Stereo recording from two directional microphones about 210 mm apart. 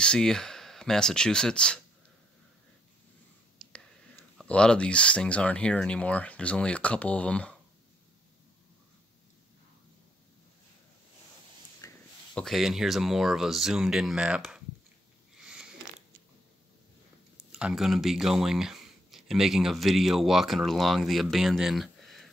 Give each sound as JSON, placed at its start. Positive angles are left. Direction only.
{"t": 0.0, "sound": "speech", "side_deg": 5}
{"t": 3.6, "sound": "whispering", "side_deg": 0}
{"t": 4.4, "sound": "speech", "side_deg": 5}
{"t": 11.8, "sound": "a sound", "side_deg": 15}
{"t": 12.4, "sound": "speech", "side_deg": 0}
{"t": 15.4, "sound": "a sound", "side_deg": -5}
{"t": 17.5, "sound": "speech", "side_deg": -5}